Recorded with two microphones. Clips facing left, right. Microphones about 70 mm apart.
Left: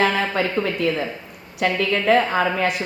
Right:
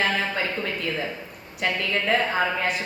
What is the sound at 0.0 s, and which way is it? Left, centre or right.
Speech, left.